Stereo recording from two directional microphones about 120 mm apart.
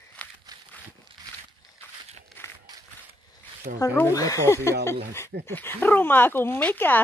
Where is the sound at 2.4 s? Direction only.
15° left (ahead or behind).